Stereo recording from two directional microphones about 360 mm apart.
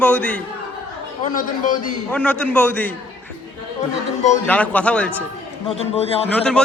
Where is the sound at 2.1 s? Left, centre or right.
Centre.